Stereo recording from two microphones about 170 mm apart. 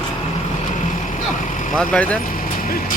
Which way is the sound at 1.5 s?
45° left (ahead or behind).